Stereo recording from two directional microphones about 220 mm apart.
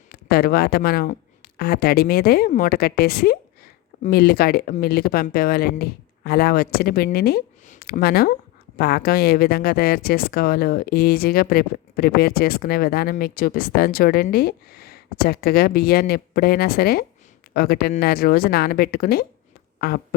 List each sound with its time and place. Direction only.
0.1 s a woman's voice: 45° left (ahead or behind)